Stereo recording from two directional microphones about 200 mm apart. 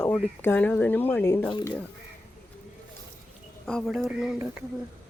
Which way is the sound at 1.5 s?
20° left (ahead or behind).